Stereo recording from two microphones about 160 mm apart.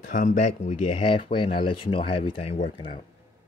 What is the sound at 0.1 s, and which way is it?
Speech, 55° left (ahead or behind).